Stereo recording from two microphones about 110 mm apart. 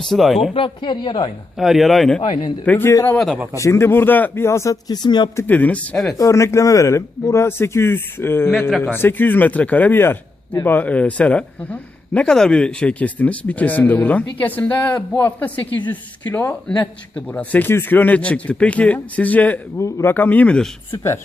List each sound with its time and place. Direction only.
0.0 s a man's voice: centre (ahead or behind)
0.5 s a woman's voice: 50° left (ahead or behind)
1.5 s a man's voice: centre (ahead or behind)
2.6 s a man's voice: 20° left (ahead or behind)
2.9 s a man's voice: 30° left (ahead or behind)
5.0 s a woman's voice: 40° left (ahead or behind)
5.4 s speech: 15° left (ahead or behind)
6.1 s a man's voice: 30° left (ahead or behind); by 20.7 s 10° left (ahead or behind)